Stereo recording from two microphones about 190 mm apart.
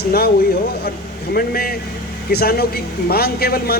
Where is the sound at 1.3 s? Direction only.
50° left (ahead or behind).